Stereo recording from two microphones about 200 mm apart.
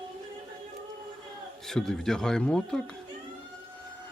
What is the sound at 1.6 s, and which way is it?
Speech, centre (ahead or behind).